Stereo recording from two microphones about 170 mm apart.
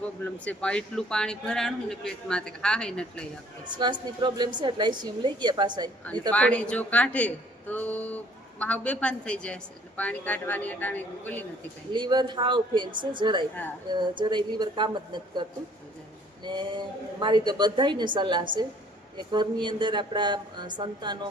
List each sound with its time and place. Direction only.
0.4 s a man's voice: 5° left (ahead or behind)
3.8 s a woman's voice: 25° right (ahead or behind)
6.3 s a woman's voice: 10° left (ahead or behind)
11.9 s a woman's voice: 25° right (ahead or behind)